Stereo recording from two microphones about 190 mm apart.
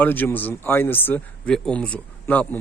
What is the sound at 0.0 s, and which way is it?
Speech, 10° left (ahead or behind).